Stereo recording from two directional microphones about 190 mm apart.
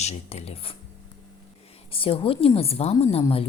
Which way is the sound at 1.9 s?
30° left (ahead or behind).